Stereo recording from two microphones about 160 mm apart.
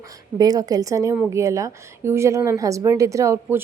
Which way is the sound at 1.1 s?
10° right (ahead or behind).